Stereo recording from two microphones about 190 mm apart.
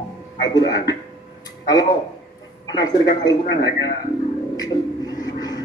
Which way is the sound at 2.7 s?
20° left (ahead or behind).